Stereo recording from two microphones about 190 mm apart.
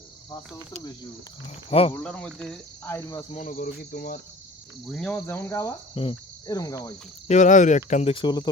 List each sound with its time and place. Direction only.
1.9 s cricket: 5° left (ahead or behind)
3.3 s cricket: 45° left (ahead or behind)
4.9 s cricket: 5° left (ahead or behind)
7.3 s speech: 40° left (ahead or behind); by 8.4 s 25° left (ahead or behind)